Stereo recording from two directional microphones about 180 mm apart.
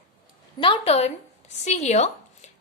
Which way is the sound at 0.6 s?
30° left (ahead or behind).